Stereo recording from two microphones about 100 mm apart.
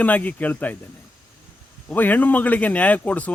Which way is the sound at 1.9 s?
15° left (ahead or behind).